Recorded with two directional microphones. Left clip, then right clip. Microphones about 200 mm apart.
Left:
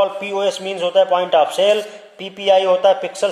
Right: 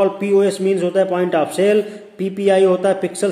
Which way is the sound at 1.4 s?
Centre (ahead or behind).